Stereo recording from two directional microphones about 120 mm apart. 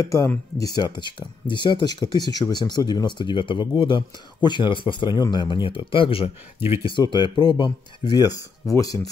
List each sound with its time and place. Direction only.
0.0 s speech: 30° left (ahead or behind); by 6.3 s 50° left (ahead or behind)
6.8 s speech: 40° left (ahead or behind)